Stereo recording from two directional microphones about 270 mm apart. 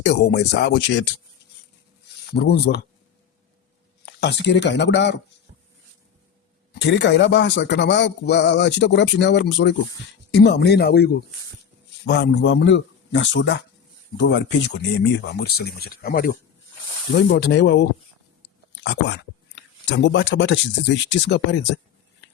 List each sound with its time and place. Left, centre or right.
0.0 s a man's voice: left
2.3 s a man's voice: left
4.0 s a man's voice: left
6.7 s a man's voice: left